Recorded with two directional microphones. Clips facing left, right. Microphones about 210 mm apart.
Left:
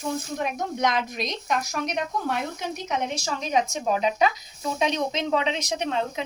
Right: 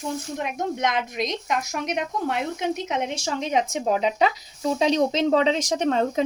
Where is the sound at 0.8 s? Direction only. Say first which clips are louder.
Left 2 dB; 20° right (ahead or behind).